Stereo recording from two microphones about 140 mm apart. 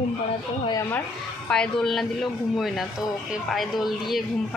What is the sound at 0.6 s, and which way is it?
Speech, 20° left (ahead or behind).